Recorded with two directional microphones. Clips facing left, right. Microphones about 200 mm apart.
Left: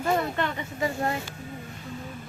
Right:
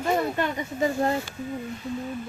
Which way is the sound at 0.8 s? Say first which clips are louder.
Right 4 dB; 25° right (ahead or behind).